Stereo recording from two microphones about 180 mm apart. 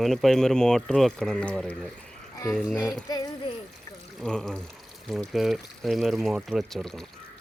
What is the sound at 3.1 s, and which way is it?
Speech, 20° left (ahead or behind).